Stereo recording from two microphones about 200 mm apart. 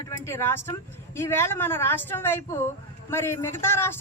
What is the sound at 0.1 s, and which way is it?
Speech, 15° left (ahead or behind).